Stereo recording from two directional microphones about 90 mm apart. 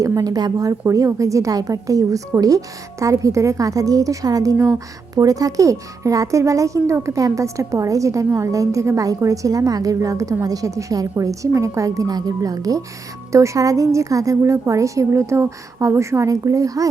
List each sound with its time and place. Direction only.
0.0 s speech: 40° right (ahead or behind)